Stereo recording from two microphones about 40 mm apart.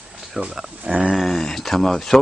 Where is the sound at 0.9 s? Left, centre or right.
Right.